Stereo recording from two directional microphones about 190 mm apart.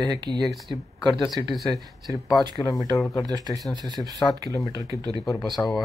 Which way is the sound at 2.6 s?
15° left (ahead or behind).